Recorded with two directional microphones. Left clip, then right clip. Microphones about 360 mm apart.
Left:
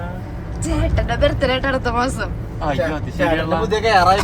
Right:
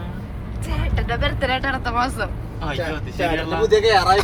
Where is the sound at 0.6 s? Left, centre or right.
Centre; by 3.7 s left.